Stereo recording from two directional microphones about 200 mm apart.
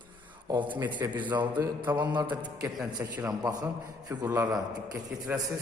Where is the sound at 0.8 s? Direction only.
20° right (ahead or behind).